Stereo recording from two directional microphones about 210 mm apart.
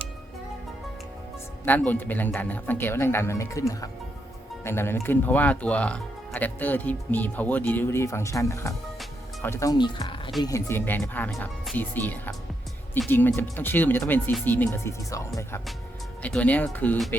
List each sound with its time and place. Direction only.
1.6 s speech: 10° left (ahead or behind)
9.0 s music: 10° left (ahead or behind)
10.4 s speech: 15° left (ahead or behind)